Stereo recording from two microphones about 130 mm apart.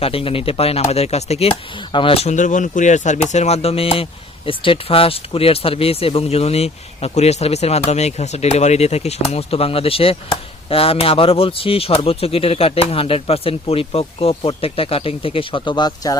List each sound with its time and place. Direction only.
0.0 s speech: 45° left (ahead or behind)